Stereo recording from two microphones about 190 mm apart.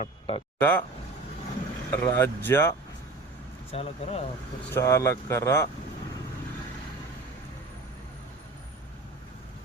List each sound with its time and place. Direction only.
0.0 s speech: 30° left (ahead or behind)
0.6 s speech: 10° left (ahead or behind)
1.9 s speech: 10° left (ahead or behind)
3.7 s speech: 30° left (ahead or behind)
4.7 s speech: 15° left (ahead or behind)